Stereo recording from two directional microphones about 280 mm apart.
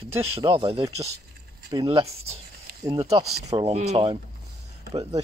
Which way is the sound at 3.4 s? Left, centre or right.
Centre.